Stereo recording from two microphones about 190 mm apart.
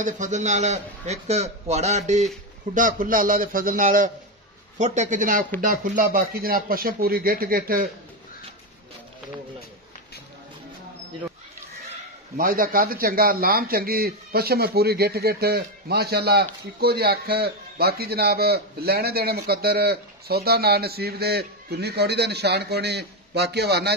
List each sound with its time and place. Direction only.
0.0 s a man's voice: 40° right (ahead or behind)
12.4 s a man's voice: 50° right (ahead or behind)